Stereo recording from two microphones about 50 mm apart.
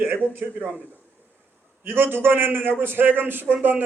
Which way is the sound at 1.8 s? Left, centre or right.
Right.